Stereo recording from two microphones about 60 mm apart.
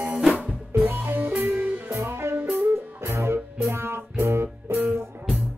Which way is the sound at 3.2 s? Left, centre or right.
Right.